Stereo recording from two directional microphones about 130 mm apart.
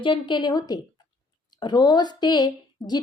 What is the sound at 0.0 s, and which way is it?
A woman's voice, 40° left (ahead or behind).